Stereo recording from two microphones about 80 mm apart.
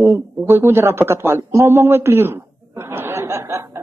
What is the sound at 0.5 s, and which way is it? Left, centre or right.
A man's voice, right.